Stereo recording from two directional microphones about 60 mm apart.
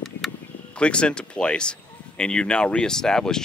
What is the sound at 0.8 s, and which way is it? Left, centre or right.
Speech, centre.